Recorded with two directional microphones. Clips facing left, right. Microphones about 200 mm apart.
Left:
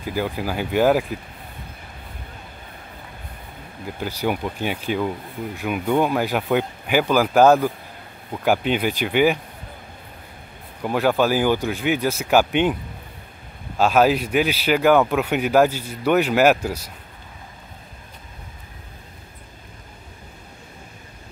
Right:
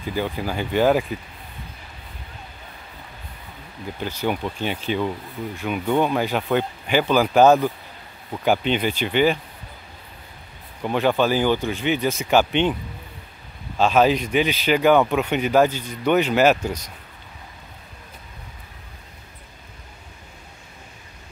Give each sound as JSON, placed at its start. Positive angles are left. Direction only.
{"t": 0.0, "sound": "speech", "side_deg": 5}
{"t": 4.0, "sound": "speech", "side_deg": 10}
{"t": 10.8, "sound": "speech", "side_deg": 5}
{"t": 13.7, "sound": "speech", "side_deg": 5}